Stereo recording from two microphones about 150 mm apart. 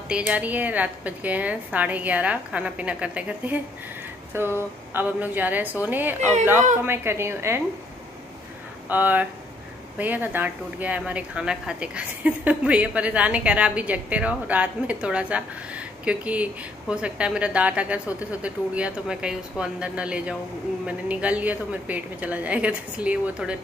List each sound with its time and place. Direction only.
0.1 s speech: 10° right (ahead or behind)
8.8 s speech: 10° right (ahead or behind)